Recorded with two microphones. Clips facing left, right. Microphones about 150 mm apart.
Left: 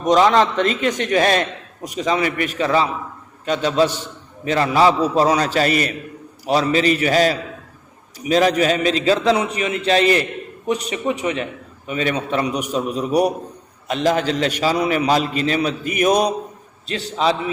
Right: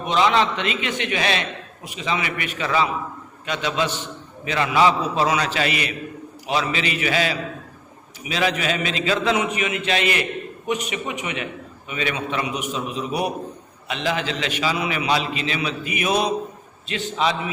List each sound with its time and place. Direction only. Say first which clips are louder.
0.0 s a man's voice: left 5 dB; 40° left (ahead or behind)